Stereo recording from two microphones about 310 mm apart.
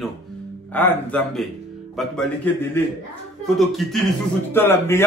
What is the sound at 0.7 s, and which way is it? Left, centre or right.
A man's voice, centre.